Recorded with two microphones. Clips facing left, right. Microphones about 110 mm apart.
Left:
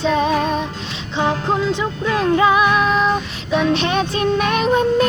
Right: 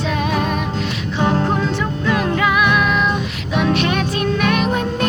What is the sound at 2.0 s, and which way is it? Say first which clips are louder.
Music: left 3 dB; 30° left (ahead or behind).